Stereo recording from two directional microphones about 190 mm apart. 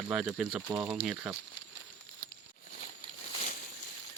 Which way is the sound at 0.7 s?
15° right (ahead or behind).